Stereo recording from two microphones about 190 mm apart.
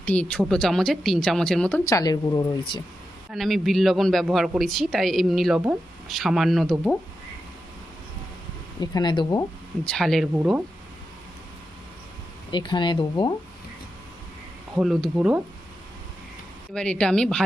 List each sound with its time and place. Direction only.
0.0 s a man's voice: 5° left (ahead or behind)
1.8 s a woman's voice: 20° left (ahead or behind)
3.3 s a man's voice: centre (ahead or behind)
8.8 s a woman's voice: 20° left (ahead or behind)
9.8 s a man's voice: 5° left (ahead or behind)
12.5 s a woman's voice: 25° left (ahead or behind)
14.8 s a man's voice: 5° right (ahead or behind)
16.7 s a man's voice: 5° left (ahead or behind)